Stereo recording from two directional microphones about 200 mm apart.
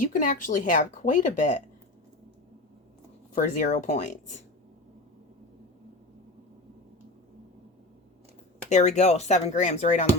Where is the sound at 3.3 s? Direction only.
40° left (ahead or behind).